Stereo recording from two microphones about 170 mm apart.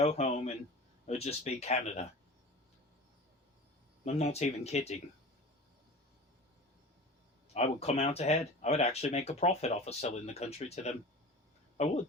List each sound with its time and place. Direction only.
0.0 s speech: 35° left (ahead or behind)
4.0 s speech: 40° left (ahead or behind)
7.5 s speech: 40° left (ahead or behind)